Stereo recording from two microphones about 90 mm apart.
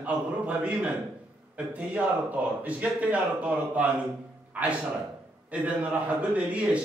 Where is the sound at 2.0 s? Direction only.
15° right (ahead or behind).